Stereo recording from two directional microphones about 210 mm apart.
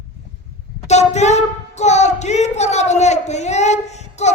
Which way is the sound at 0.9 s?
30° left (ahead or behind).